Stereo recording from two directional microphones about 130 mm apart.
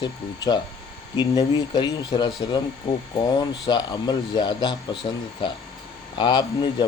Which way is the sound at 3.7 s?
35° left (ahead or behind).